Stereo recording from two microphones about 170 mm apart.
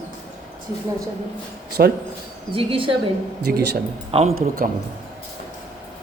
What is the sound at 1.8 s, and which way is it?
Speech, 75° right (ahead or behind).